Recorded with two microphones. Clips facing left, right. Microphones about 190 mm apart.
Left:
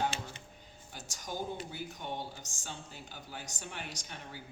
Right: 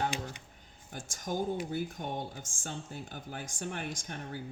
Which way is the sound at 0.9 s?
50° right (ahead or behind).